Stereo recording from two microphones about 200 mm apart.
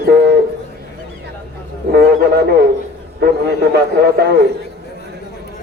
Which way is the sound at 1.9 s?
55° right (ahead or behind).